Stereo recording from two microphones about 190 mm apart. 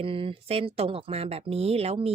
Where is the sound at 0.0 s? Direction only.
30° right (ahead or behind).